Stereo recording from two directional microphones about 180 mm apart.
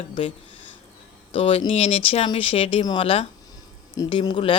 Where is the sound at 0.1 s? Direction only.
30° left (ahead or behind).